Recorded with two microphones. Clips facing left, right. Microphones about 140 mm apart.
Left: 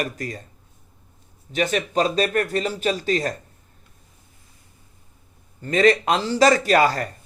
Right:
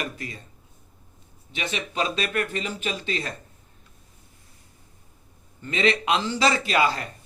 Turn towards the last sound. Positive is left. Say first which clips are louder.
# left 5 dB
turn(degrees=45)  # may be behind; listen again after turning